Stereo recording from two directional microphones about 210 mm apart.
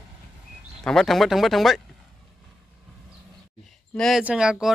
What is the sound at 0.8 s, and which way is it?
Speech, centre (ahead or behind).